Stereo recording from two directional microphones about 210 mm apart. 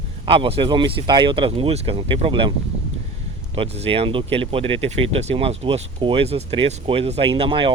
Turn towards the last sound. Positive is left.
turn(degrees=-25)  # may be behind; listen again after turning